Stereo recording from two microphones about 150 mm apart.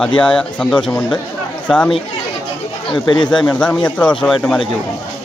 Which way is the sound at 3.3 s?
5° left (ahead or behind).